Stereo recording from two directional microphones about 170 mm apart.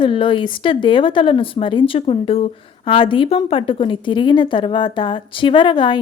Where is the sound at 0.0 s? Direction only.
30° left (ahead or behind).